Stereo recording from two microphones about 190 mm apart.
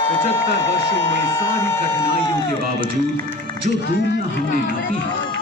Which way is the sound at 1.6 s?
15° left (ahead or behind).